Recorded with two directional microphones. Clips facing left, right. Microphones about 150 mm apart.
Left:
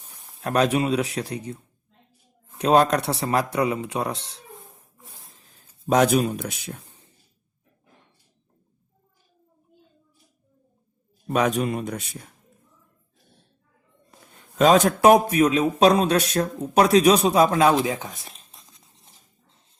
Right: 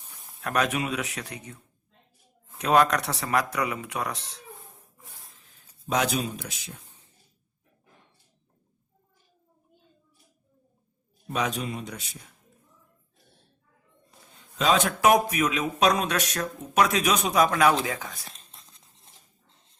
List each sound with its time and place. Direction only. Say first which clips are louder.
0.4 s speech: left 6 dB; 30° left (ahead or behind)
2.6 s speech: left 3 dB; 30° left (ahead or behind)
5.4 s a sound: left 4 dB; 35° left (ahead or behind)
5.8 s a man's voice: left 8 dB; 50° left (ahead or behind)
11.3 s a man's voice: left 7 dB; 55° left (ahead or behind)
14.6 s speech: left 6 dB; 45° left (ahead or behind); by 18.3 s 25° left (ahead or behind)
18.3 s a sound: left 1 dB; centre (ahead or behind)